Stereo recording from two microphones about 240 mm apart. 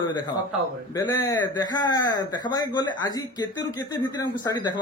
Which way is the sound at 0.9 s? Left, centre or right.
Centre.